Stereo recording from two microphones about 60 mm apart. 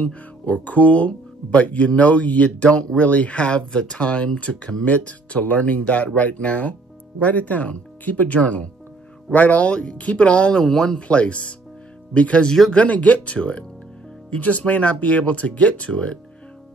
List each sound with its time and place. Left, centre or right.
0.0 s speech: left